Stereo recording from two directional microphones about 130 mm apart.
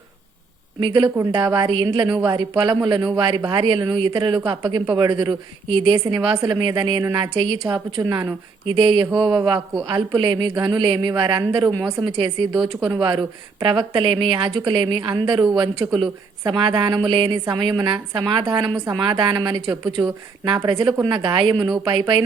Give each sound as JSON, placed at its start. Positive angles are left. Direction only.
{"t": 0.8, "sound": "a woman's voice", "side_deg": -35}
{"t": 8.0, "sound": "a woman's voice", "side_deg": -25}
{"t": 8.6, "sound": "a woman's voice", "side_deg": -40}